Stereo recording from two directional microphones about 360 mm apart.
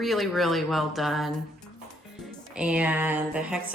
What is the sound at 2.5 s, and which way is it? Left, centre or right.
A woman's voice, centre.